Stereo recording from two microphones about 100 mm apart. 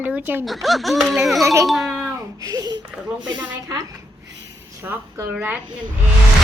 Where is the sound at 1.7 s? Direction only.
Centre (ahead or behind).